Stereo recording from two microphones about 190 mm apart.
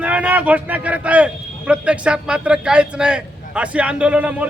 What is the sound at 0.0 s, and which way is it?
A man's voice, 5° right (ahead or behind).